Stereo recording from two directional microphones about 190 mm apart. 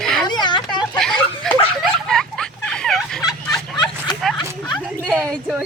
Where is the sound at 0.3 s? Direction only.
20° left (ahead or behind).